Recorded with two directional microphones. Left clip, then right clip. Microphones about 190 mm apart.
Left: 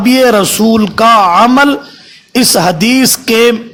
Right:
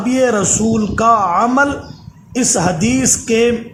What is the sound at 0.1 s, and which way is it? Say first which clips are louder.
A man's voice: left 6 dB; 35° left (ahead or behind).